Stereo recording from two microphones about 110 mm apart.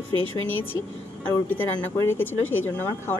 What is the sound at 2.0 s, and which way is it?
A woman's voice, 20° left (ahead or behind).